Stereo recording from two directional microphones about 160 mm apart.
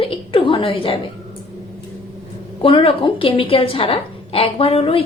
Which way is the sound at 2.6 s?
35° left (ahead or behind).